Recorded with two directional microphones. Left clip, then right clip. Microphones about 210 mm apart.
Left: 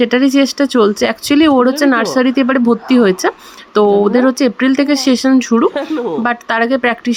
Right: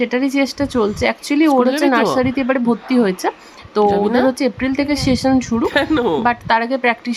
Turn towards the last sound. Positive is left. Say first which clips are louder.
# left 3 dB
turn(degrees=15)  # may be behind; listen again after turning